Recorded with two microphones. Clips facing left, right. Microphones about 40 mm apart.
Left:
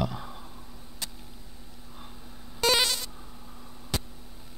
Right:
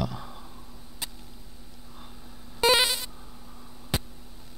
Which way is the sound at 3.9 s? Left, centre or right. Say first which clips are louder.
Right 2 dB; centre.